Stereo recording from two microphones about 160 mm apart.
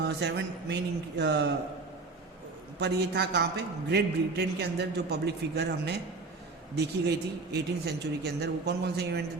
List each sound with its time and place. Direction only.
0.0 s a man's voice: 90° right
2.7 s a man's voice: 90° right